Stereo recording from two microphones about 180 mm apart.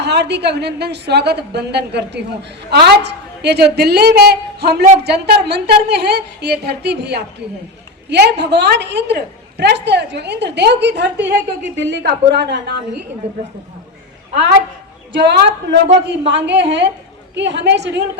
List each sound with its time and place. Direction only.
0.0 s a woman's voice: 70° right (ahead or behind)
15.1 s a woman's voice: 70° right (ahead or behind)